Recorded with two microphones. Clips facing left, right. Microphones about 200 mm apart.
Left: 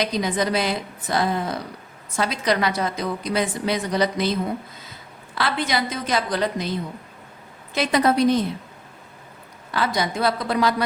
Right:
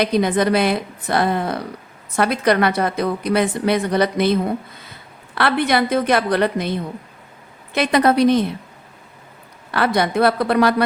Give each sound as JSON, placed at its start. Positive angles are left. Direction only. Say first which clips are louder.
{"t": 0.0, "sound": "a woman's voice", "louder": "right 6 dB", "side_deg": -60}
{"t": 9.7, "sound": "a woman's voice", "louder": "right 6 dB", "side_deg": -60}